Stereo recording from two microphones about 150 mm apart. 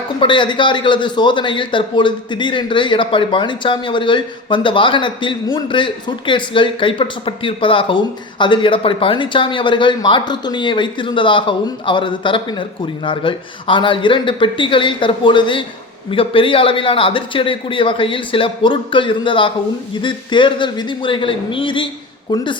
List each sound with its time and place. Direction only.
0.2 s a man's voice: 35° left (ahead or behind)